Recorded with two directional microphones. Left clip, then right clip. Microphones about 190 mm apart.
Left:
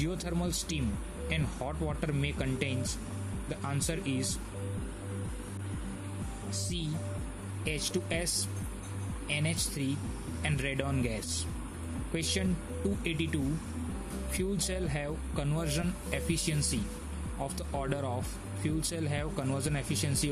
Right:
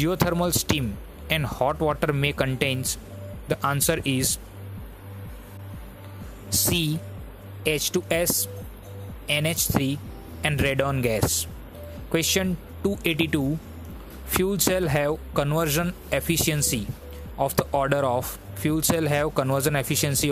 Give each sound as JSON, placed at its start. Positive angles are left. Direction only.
{"t": 0.0, "sound": "speech", "side_deg": -50}
{"t": 7.6, "sound": "speech", "side_deg": -45}
{"t": 9.3, "sound": "speech", "side_deg": -45}
{"t": 14.4, "sound": "speech", "side_deg": -45}